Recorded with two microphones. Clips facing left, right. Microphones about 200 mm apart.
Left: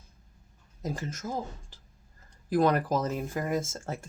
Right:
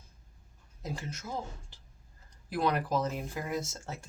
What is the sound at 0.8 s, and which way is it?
Speech, 45° left (ahead or behind).